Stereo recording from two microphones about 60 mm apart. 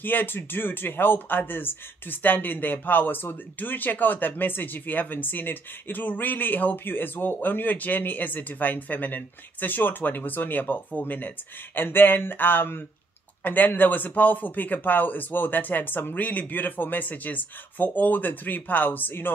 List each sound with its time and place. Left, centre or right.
0.0 s speech: left